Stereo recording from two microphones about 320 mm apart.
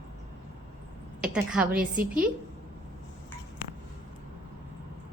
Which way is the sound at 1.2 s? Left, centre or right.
Centre.